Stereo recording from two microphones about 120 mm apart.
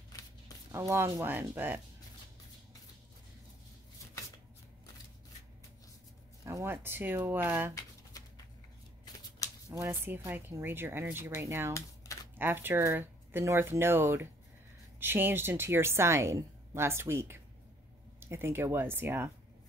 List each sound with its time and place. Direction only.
0.7 s a woman's voice: 20° right (ahead or behind)
6.4 s a woman's voice: 25° right (ahead or behind)
9.7 s a woman's voice: 20° right (ahead or behind)